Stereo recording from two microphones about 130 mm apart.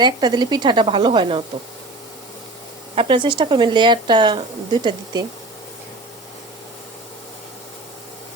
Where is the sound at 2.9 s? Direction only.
45° right (ahead or behind).